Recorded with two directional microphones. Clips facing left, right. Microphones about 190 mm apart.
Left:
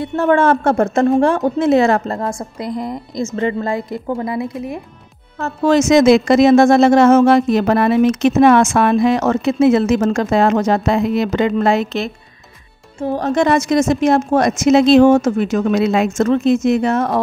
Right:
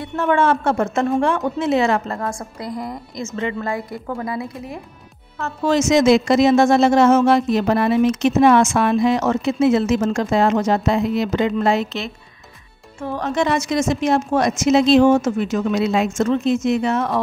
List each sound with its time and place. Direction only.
0.0 s a woman's voice: 35° left (ahead or behind)
2.1 s speech: 25° left (ahead or behind)
3.3 s a woman's voice: 35° left (ahead or behind)
5.4 s speech: 50° left (ahead or behind)
13.0 s speech: 35° left (ahead or behind)